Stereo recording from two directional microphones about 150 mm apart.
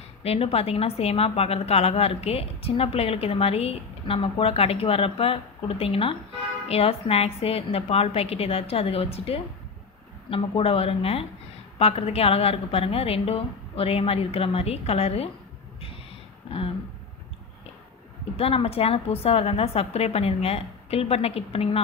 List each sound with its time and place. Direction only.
0.2 s a woman's voice: 40° left (ahead or behind)
16.4 s a sound: 40° left (ahead or behind)
18.3 s a woman's voice: 40° left (ahead or behind)